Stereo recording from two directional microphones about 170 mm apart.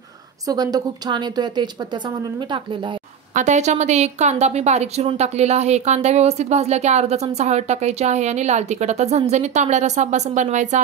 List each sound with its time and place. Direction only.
0.5 s a woman's voice: 20° right (ahead or behind)
3.3 s a woman's voice: 45° right (ahead or behind)